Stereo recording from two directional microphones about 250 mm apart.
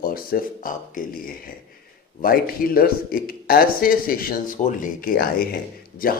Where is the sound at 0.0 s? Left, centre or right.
Left.